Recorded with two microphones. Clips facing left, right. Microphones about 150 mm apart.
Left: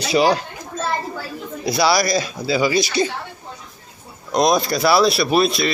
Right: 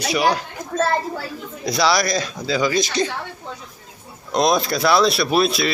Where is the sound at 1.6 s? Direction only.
5° left (ahead or behind).